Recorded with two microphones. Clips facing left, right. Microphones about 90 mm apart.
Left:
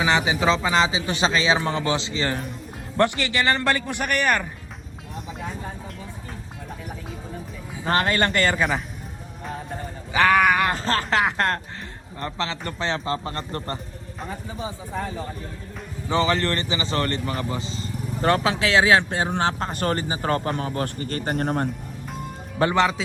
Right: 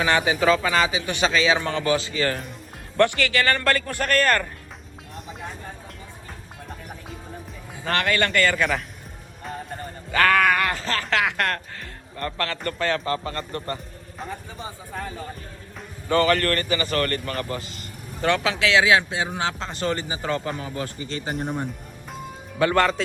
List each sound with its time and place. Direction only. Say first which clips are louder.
0.0 s a man's voice: even; 15° left (ahead or behind)
7.9 s speech: left 2 dB; 35° left (ahead or behind)
8.5 s speech: even; 5° left (ahead or behind)
10.1 s a sound: left 1 dB; 15° left (ahead or behind)
10.7 s a man's voice: left 2 dB; 35° left (ahead or behind)
14.2 s speech: left 2 dB; 5° left (ahead or behind)
16.0 s a man's voice: right 2 dB; 20° left (ahead or behind); by 21.3 s 50° left (ahead or behind)
22.6 s speech: even; 35° left (ahead or behind)
23.0 s speech: right 2 dB; centre (ahead or behind)